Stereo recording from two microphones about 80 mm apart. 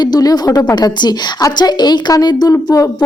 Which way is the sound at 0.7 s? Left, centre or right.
Left.